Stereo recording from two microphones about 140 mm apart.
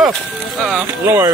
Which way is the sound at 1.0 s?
15° right (ahead or behind).